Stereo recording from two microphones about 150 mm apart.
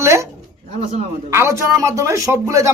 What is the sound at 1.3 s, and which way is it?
Speech, 20° right (ahead or behind).